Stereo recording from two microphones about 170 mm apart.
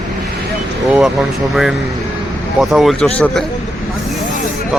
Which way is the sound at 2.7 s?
Centre (ahead or behind).